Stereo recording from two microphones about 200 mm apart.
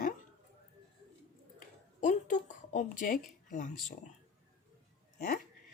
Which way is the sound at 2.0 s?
40° left (ahead or behind).